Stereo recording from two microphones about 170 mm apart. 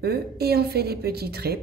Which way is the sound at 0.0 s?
70° right (ahead or behind).